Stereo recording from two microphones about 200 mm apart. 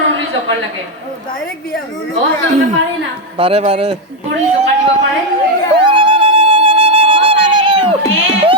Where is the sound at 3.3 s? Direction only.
30° right (ahead or behind).